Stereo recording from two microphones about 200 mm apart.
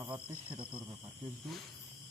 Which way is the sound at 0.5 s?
25° right (ahead or behind).